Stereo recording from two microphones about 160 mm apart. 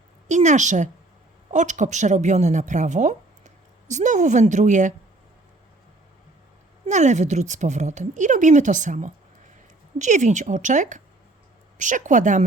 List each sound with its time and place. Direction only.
0.3 s a woman's voice: 50° right (ahead or behind)
6.8 s a woman's voice: 50° right (ahead or behind)